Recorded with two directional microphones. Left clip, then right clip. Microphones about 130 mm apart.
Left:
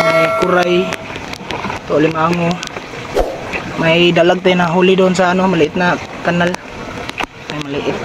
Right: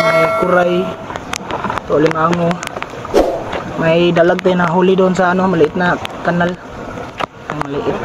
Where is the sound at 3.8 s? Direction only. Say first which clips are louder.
Left 1 dB; 5° left (ahead or behind).